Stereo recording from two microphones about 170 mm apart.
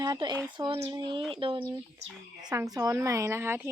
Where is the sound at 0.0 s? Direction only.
25° right (ahead or behind).